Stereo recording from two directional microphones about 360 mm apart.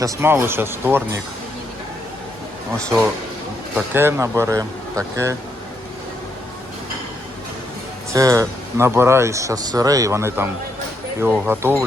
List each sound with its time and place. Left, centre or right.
0.0 s speech: centre
2.7 s speech: centre
8.1 s speech: centre